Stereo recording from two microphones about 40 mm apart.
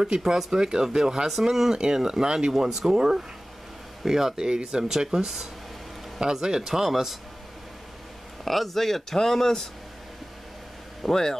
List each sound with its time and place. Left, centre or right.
0.0 s speech: centre
8.5 s speech: centre
11.0 s speech: centre